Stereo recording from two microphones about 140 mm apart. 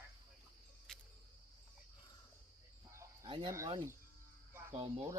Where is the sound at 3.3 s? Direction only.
35° right (ahead or behind).